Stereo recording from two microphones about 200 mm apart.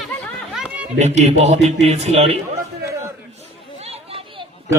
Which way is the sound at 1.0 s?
35° right (ahead or behind).